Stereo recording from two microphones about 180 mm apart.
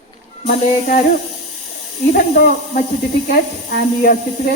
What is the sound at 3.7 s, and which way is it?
Speech, 55° left (ahead or behind).